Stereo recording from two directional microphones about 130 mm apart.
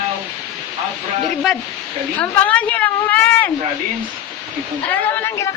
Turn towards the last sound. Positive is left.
turn(degrees=20)  # may be behind; listen again after turning